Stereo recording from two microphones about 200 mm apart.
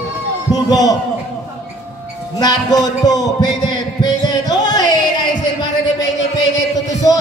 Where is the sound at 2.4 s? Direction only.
20° left (ahead or behind).